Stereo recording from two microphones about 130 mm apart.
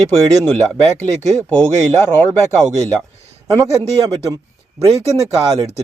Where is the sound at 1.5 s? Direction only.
15° left (ahead or behind).